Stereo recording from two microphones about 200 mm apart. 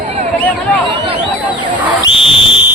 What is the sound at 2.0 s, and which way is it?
Whistle, 25° left (ahead or behind).